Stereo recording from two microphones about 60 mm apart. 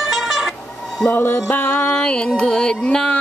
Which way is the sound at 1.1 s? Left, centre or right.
Left.